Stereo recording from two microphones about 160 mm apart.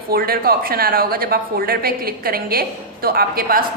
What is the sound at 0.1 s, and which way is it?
A woman's voice, 70° right (ahead or behind).